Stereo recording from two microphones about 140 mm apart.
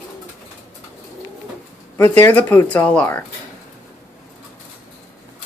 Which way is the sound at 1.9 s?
20° left (ahead or behind).